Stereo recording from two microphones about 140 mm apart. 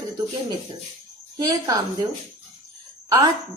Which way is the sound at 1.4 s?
25° right (ahead or behind).